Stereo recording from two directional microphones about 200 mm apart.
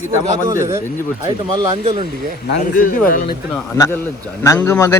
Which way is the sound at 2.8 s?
45° left (ahead or behind).